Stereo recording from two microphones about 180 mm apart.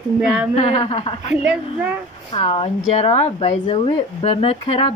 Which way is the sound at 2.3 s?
30° left (ahead or behind).